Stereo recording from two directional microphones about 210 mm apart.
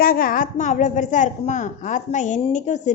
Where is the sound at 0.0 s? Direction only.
45° left (ahead or behind).